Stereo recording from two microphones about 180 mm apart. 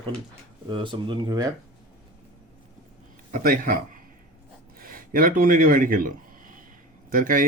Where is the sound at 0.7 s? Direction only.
25° right (ahead or behind).